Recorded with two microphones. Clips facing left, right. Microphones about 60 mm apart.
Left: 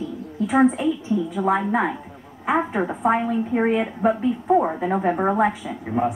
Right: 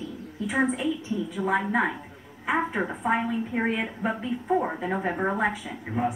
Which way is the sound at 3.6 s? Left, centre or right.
Centre.